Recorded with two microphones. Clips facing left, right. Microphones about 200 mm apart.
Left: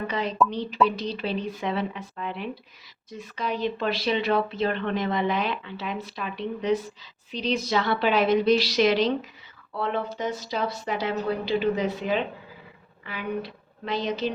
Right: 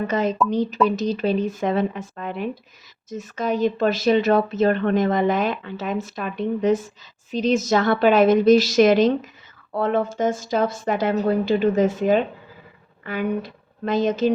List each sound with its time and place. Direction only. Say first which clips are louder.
0.1 s a woman's voice: right 3 dB; 45° right (ahead or behind)